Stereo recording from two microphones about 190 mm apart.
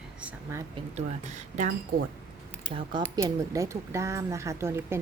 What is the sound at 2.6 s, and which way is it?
Speech, 25° right (ahead or behind).